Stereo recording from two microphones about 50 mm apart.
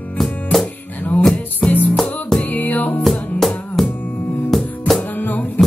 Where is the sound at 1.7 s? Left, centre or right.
Left.